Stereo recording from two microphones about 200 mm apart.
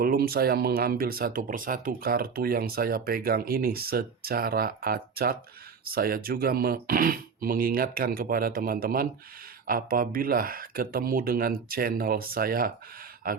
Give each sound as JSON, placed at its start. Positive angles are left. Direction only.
{"t": 0.0, "sound": "speech", "side_deg": -50}